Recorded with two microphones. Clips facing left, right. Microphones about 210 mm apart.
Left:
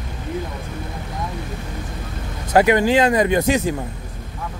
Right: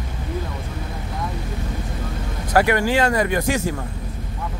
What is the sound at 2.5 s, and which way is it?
Speech, 20° left (ahead or behind).